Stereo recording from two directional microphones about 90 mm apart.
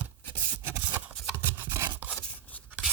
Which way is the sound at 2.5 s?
15° left (ahead or behind).